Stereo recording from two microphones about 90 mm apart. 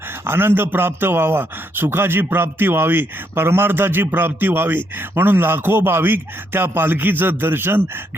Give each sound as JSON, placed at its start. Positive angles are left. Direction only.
{"t": 0.3, "sound": "a man's voice", "side_deg": -25}